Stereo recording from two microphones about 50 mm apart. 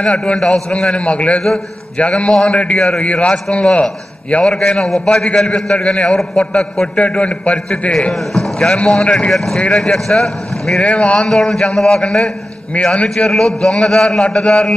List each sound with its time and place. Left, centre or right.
0.0 s a man's voice: centre
4.6 s a man's voice: centre
8.1 s a man's voice: centre
9.3 s a man's voice: centre
10.8 s a man's voice: left
11.2 s a man's voice: centre
12.7 s a man's voice: left
13.1 s a man's voice: centre